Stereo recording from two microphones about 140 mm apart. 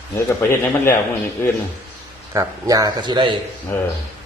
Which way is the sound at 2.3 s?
25° right (ahead or behind).